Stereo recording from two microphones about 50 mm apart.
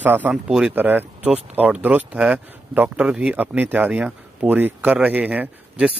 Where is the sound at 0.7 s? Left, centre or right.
Right.